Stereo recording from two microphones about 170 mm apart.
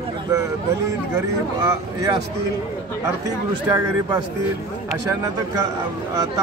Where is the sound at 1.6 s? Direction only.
20° right (ahead or behind).